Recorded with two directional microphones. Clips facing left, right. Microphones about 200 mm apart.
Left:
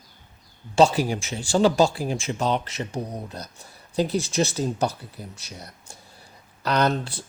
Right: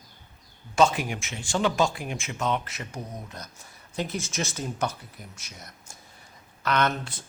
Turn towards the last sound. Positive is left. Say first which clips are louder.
# left 4 dB
turn(degrees=35)  # may be behind; listen again after turning